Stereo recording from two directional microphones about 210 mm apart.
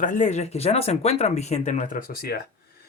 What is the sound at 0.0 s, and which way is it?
Speech, 35° left (ahead or behind).